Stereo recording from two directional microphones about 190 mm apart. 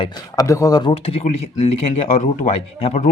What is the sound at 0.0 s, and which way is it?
Speech, 20° left (ahead or behind).